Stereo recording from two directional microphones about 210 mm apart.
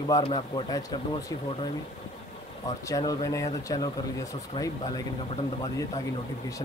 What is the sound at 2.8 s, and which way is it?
Speech, 15° left (ahead or behind).